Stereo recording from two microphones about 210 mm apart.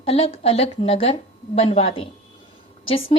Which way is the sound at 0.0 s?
30° left (ahead or behind).